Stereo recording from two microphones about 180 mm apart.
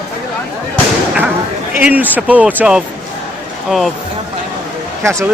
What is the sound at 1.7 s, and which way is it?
Speech, 10° right (ahead or behind).